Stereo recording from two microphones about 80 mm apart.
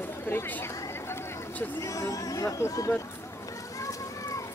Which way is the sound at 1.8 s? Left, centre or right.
Left.